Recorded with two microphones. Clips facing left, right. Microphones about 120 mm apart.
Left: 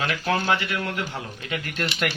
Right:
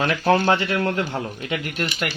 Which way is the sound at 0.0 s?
35° right (ahead or behind).